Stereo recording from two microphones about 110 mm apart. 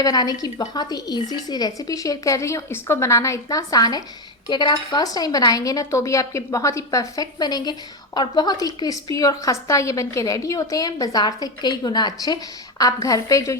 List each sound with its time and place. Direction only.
0.0 s a woman's voice: 35° left (ahead or behind)